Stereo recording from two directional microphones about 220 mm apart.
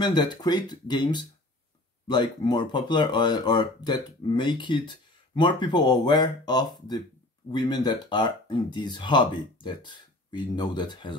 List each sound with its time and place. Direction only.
0.0 s speech: 20° left (ahead or behind)